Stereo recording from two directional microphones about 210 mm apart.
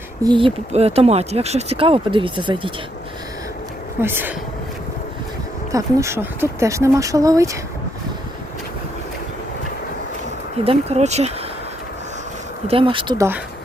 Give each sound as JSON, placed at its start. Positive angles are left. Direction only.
{"t": 0.2, "sound": "speech", "side_deg": -20}
{"t": 4.0, "sound": "speech", "side_deg": -10}
{"t": 5.7, "sound": "speech", "side_deg": -15}
{"t": 10.6, "sound": "speech", "side_deg": -30}
{"t": 12.6, "sound": "speech", "side_deg": -25}